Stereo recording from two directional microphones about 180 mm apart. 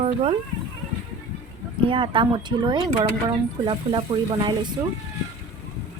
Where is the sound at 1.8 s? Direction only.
30° right (ahead or behind).